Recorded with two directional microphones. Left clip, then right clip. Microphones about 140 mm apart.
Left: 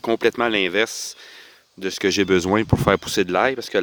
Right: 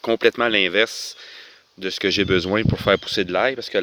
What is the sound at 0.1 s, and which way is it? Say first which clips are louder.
Speech: right 2 dB; 40° left (ahead or behind).